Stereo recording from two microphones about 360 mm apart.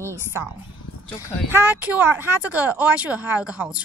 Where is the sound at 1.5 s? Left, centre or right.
Centre.